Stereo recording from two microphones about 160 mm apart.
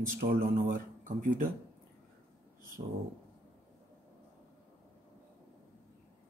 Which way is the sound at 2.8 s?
55° right (ahead or behind).